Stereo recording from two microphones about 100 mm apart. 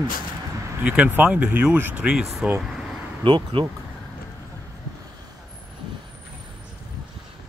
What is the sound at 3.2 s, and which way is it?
Speech, 55° right (ahead or behind).